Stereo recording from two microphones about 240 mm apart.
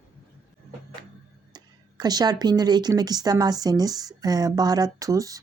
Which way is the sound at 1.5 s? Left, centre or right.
Centre.